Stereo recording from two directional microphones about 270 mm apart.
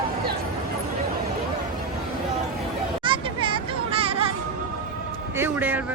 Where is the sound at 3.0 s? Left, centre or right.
Centre.